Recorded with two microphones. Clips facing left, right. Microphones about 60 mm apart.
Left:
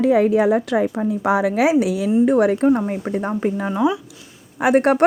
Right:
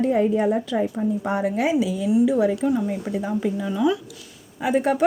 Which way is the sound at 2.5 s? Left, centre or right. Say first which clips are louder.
Left 5 dB; left.